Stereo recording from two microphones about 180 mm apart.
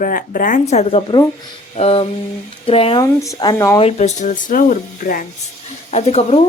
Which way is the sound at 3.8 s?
35° left (ahead or behind).